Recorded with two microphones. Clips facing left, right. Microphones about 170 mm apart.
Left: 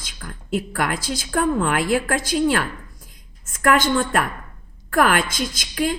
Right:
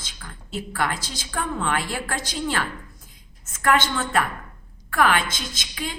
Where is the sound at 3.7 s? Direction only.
45° left (ahead or behind).